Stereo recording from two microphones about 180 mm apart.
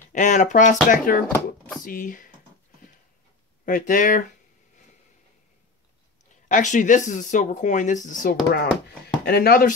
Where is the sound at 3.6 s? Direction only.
50° left (ahead or behind).